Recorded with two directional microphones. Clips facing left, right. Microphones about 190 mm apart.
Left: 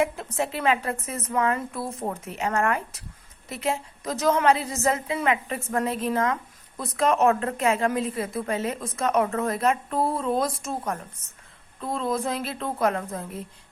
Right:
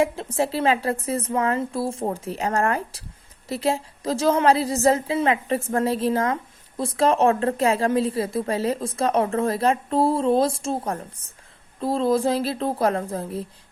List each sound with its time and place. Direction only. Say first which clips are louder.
0.0 s a woman's voice: right 3 dB; 30° right (ahead or behind)